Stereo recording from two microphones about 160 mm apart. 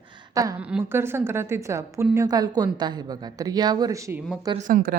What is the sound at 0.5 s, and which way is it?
A woman's voice, 10° right (ahead or behind).